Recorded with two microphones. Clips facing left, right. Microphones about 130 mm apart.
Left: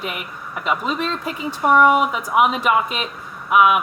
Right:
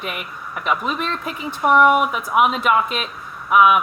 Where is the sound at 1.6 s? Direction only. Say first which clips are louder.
Even; 15° right (ahead or behind).